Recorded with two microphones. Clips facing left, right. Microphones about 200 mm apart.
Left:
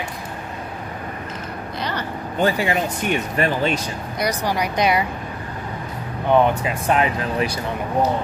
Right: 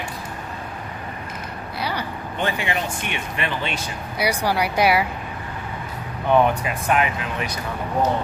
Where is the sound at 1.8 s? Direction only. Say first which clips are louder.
Even; 10° right (ahead or behind).